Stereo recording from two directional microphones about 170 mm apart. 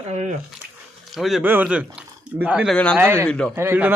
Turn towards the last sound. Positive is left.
turn(degrees=-10)  # may be behind; listen again after turning